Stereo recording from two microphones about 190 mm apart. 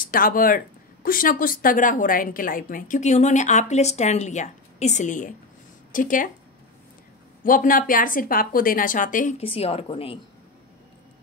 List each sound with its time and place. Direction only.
0.0 s a woman's voice: 45° left (ahead or behind)
7.4 s a woman's voice: 45° left (ahead or behind)
9.4 s a woman's voice: 30° left (ahead or behind)